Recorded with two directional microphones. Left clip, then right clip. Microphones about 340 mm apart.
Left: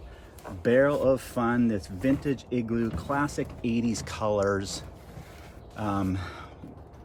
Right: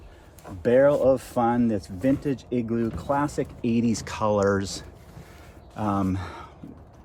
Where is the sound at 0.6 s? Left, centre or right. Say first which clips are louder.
Right 4 dB; centre.